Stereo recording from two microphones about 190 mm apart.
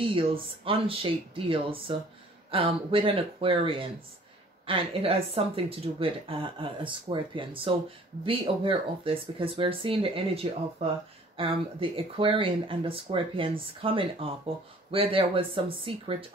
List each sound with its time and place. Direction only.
0.0 s speech: 30° right (ahead or behind)